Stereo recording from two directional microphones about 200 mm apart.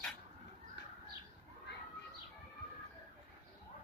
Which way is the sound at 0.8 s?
55° left (ahead or behind).